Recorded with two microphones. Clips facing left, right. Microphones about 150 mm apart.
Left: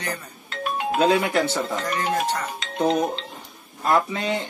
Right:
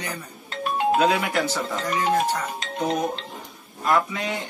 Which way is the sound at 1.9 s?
10° right (ahead or behind).